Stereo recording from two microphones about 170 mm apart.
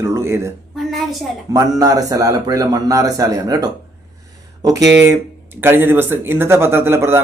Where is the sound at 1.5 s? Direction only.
20° right (ahead or behind).